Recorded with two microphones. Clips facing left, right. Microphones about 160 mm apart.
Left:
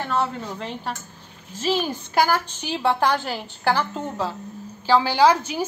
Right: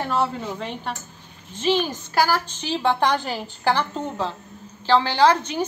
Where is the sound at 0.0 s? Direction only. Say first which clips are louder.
Right 1 dB; 10° right (ahead or behind).